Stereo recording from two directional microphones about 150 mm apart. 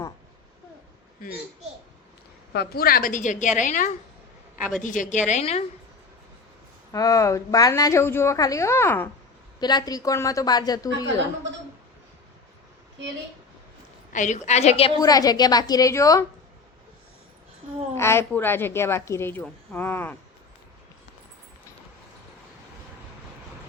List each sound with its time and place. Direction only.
2.6 s a woman's voice: 85° left; by 5.2 s 55° left (ahead or behind)
5.3 s a woman's voice: 45° left (ahead or behind)
6.9 s a woman's voice: 25° left (ahead or behind)
9.6 s a woman's voice: 30° left (ahead or behind)
14.1 s a woman's voice: 55° left (ahead or behind)
15.0 s a woman's voice: 25° left (ahead or behind)
17.9 s a woman's voice: 15° left (ahead or behind)